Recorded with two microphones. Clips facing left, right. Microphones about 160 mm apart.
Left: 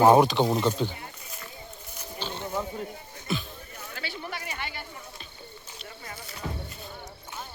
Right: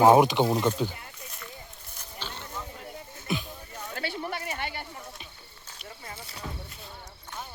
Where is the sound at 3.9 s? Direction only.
55° right (ahead or behind).